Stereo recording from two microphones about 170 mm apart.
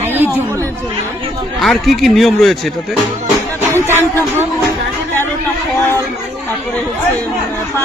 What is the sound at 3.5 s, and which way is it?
Speech, 15° right (ahead or behind).